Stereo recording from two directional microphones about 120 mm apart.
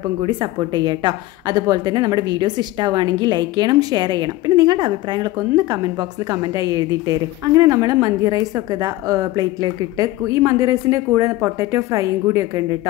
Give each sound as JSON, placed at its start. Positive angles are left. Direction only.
{"t": 0.3, "sound": "a woman's voice", "side_deg": -40}